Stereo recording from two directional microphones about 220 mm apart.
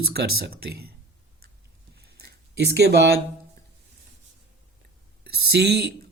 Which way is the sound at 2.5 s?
50° right (ahead or behind).